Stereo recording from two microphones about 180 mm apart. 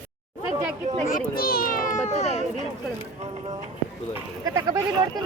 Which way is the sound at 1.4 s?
55° left (ahead or behind).